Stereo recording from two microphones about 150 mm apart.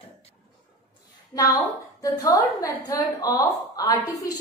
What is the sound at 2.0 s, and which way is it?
A woman's voice, 25° left (ahead or behind).